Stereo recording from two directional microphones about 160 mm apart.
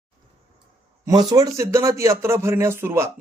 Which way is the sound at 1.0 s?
25° right (ahead or behind).